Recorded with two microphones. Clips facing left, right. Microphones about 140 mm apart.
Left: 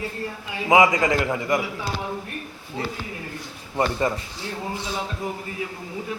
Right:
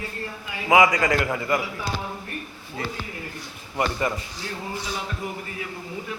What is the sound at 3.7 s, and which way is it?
Speech, 25° left (ahead or behind).